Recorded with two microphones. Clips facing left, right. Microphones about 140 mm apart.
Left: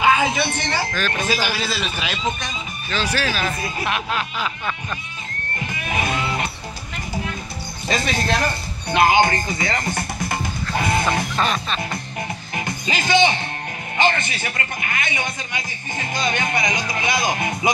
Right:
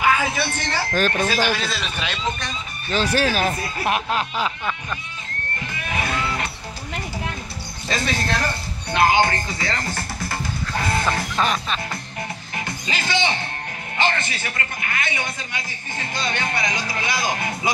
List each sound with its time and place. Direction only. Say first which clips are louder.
0.0 s speech: left 3 dB; 20° left (ahead or behind)
0.9 s speech: right 4 dB; 45° right (ahead or behind)
1.2 s a man's voice: right 1 dB; 10° left (ahead or behind)
2.9 s speech: right 3 dB; 50° right (ahead or behind)
3.8 s speech: right 3 dB; 40° right (ahead or behind)
5.6 s music: left 3 dB; 15° left (ahead or behind)
7.9 s a man's voice: left 2 dB; 20° left (ahead or behind)
8.9 s music: left 2 dB; 15° left (ahead or behind)
11.3 s music: even; 10° right (ahead or behind)
12.5 s music: left 3 dB; 15° left (ahead or behind)
13.9 s a man's voice: left 3 dB; 20° left (ahead or behind)